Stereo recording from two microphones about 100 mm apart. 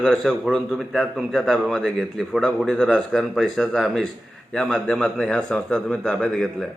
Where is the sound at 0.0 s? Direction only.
5° left (ahead or behind).